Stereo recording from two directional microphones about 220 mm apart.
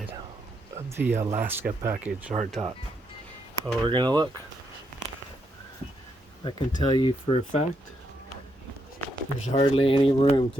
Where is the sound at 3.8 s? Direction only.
20° right (ahead or behind).